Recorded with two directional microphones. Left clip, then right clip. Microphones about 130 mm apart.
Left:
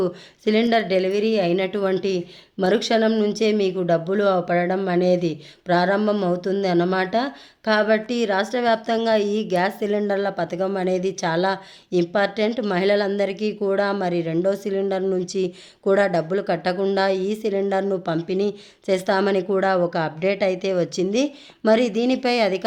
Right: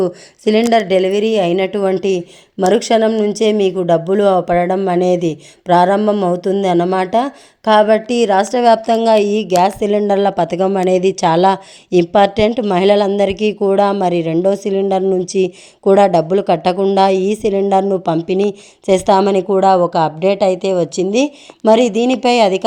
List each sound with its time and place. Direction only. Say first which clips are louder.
0.0 s speech: right 7 dB; 45° right (ahead or behind)
12.5 s a woman's voice: right 8 dB; 35° right (ahead or behind)
12.7 s a woman's voice: right 8 dB; 50° right (ahead or behind)